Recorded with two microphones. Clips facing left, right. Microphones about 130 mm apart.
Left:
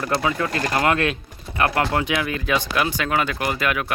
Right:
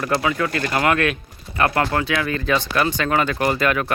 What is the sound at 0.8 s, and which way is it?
Speech, 25° left (ahead or behind).